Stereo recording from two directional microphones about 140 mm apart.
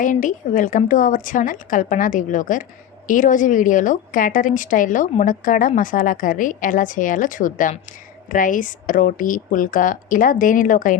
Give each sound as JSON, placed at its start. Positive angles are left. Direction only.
{"t": 0.0, "sound": "a woman's voice", "side_deg": 70}